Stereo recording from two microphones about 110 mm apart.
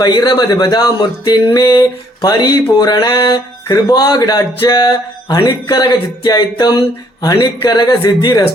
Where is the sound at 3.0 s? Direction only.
45° left (ahead or behind).